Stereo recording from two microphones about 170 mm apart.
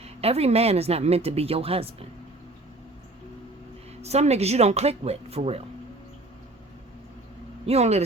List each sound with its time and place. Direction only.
0.0 s speech: 35° right (ahead or behind)
4.0 s speech: 40° right (ahead or behind)
7.7 s speech: 40° right (ahead or behind)